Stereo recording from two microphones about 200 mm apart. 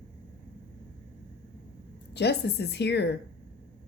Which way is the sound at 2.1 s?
55° left (ahead or behind).